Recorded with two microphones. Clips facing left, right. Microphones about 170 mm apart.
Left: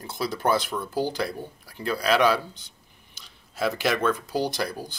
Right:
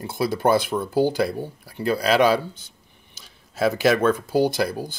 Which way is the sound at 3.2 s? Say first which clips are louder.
Right 5 dB; 45° right (ahead or behind).